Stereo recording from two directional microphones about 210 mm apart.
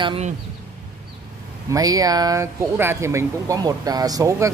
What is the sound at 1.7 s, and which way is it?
Speech, 15° right (ahead or behind).